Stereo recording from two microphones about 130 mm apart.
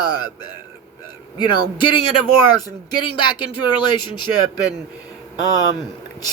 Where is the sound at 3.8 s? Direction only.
35° left (ahead or behind).